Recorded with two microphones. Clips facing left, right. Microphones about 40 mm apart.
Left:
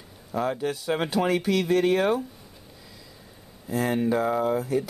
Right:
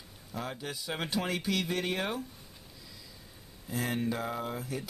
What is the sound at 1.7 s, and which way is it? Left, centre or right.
Speech, centre.